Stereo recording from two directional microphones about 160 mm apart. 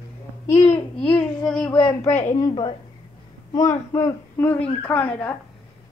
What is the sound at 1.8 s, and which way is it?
Speech, 35° left (ahead or behind).